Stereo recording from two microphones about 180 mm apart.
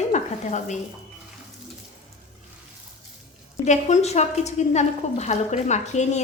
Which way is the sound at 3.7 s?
40° left (ahead or behind).